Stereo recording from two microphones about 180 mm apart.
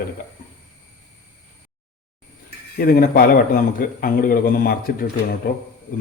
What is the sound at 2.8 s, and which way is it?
A man's voice, 55° left (ahead or behind).